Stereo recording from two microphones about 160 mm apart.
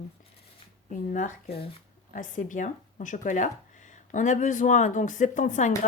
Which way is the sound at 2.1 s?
50° left (ahead or behind).